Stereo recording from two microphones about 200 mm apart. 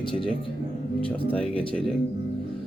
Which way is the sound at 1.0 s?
5° left (ahead or behind).